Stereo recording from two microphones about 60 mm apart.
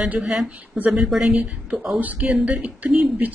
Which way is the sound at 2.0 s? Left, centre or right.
Right.